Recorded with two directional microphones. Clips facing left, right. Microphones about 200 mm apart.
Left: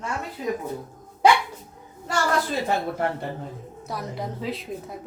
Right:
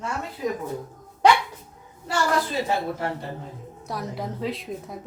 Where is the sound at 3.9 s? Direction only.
Centre (ahead or behind).